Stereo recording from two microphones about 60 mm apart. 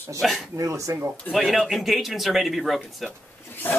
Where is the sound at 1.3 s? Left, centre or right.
Centre.